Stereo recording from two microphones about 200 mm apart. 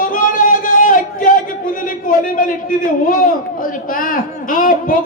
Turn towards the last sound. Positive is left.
turn(degrees=45)  # may be behind; listen again after turning